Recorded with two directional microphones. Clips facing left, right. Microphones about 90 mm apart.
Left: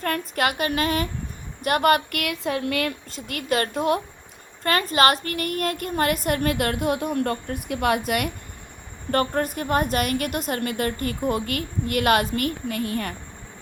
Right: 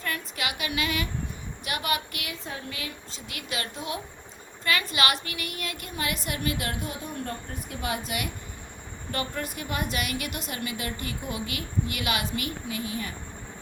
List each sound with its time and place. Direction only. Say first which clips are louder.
0.0 s a woman's voice: left 8 dB; 50° left (ahead or behind)